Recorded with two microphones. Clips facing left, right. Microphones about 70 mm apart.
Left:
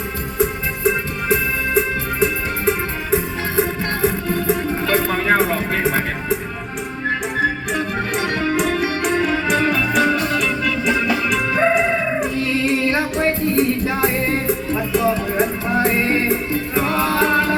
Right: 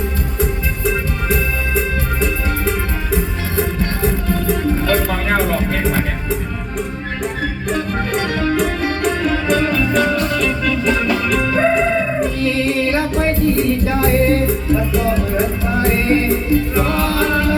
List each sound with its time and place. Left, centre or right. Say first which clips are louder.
4.0 s music: left 1 dB; centre
9.2 s music: right 3 dB; centre